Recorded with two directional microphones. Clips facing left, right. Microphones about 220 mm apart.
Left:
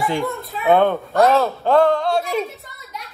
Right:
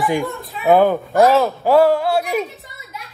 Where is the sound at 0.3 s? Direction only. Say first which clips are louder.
Right 1 dB; centre (ahead or behind).